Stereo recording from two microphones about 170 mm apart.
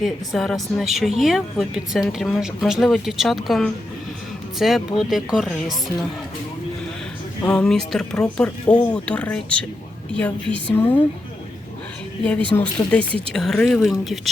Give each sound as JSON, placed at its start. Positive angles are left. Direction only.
{"t": 0.0, "sound": "speech", "side_deg": 0}
{"t": 7.4, "sound": "speech", "side_deg": 5}
{"t": 12.5, "sound": "speech", "side_deg": 20}
{"t": 12.9, "sound": "speech", "side_deg": 5}